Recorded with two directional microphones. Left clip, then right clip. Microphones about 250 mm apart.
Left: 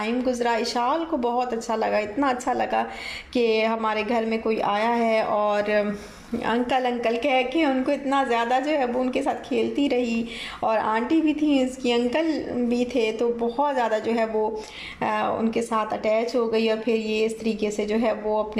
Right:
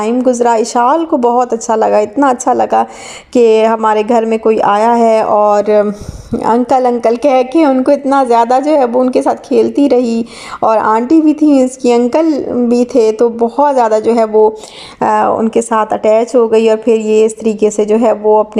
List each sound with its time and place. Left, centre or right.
0.0 s a woman's voice: right